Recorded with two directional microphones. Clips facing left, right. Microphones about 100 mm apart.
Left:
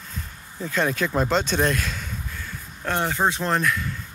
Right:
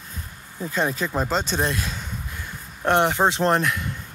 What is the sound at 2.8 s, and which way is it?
Speech, 25° right (ahead or behind).